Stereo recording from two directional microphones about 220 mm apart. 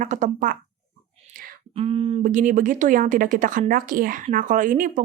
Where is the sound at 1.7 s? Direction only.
25° right (ahead or behind).